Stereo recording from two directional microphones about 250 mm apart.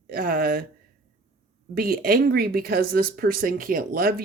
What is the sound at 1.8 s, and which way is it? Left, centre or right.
Speech, right.